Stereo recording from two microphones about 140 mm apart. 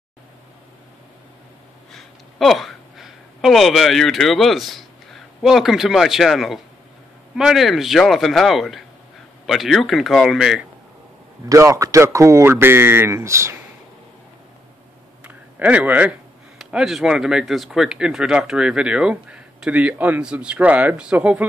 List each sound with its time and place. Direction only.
1.9 s speech: centre (ahead or behind)
11.4 s speech: 20° right (ahead or behind)
15.2 s speech: 10° right (ahead or behind)